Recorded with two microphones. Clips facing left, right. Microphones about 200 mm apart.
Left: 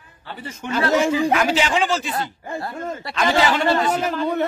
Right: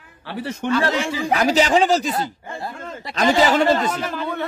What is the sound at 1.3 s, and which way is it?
Speech, 40° right (ahead or behind).